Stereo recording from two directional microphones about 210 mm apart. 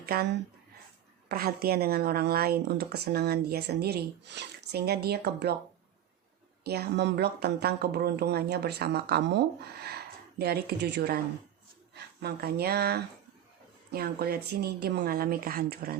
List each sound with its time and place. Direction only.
0.0 s speech: 50° right (ahead or behind)
6.7 s speech: 50° right (ahead or behind)
12.2 s speech: 50° right (ahead or behind)